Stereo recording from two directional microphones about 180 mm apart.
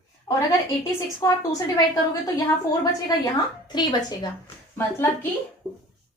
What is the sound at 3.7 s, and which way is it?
Speech, 25° left (ahead or behind).